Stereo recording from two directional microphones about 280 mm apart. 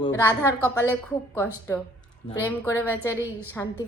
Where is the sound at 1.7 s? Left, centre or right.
Centre.